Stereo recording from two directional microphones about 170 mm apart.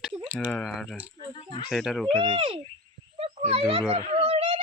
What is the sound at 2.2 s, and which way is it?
Speech, 30° right (ahead or behind).